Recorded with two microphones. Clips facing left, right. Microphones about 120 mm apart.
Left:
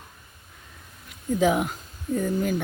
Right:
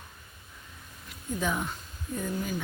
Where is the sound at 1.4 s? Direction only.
90° left.